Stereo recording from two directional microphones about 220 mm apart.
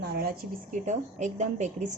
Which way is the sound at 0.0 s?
45° right (ahead or behind).